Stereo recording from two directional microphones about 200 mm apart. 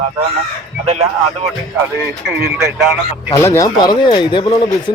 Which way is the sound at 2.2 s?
5° right (ahead or behind).